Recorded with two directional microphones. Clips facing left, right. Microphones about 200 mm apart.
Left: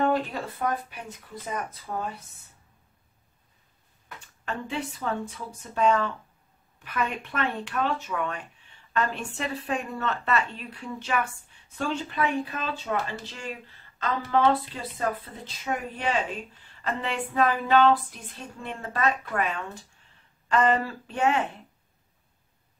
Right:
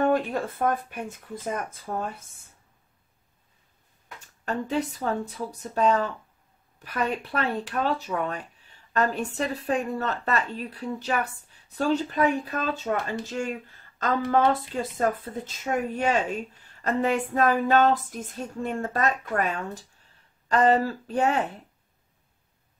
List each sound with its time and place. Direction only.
0.1 s female singing: 50° right (ahead or behind)
4.5 s speech: 40° right (ahead or behind)
13.2 s female singing: 45° right (ahead or behind)
20.4 s speech: 40° right (ahead or behind)